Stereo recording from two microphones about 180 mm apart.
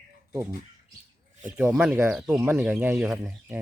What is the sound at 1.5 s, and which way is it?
Speech, 5° right (ahead or behind).